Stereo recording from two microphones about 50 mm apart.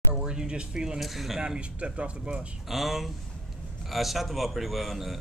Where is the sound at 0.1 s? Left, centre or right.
Centre.